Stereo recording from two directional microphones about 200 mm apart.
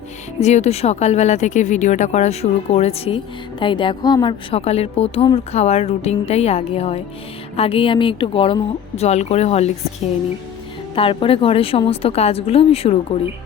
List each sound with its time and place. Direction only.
0.3 s a woman's voice: 35° left (ahead or behind)
10.9 s speech: 25° left (ahead or behind)